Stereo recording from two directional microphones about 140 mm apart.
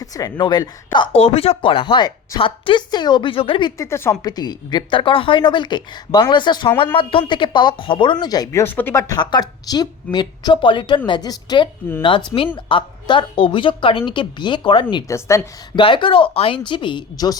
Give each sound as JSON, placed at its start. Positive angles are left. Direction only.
{"t": 0.0, "sound": "speech", "side_deg": 25}
{"t": 0.9, "sound": "a woman's voice", "side_deg": 45}
{"t": 3.8, "sound": "speech", "side_deg": 20}
{"t": 4.2, "sound": "a woman's voice", "side_deg": 30}
{"t": 8.6, "sound": "a woman's voice", "side_deg": 15}
{"t": 15.0, "sound": "speech", "side_deg": 20}
{"t": 15.7, "sound": "a woman's voice", "side_deg": 35}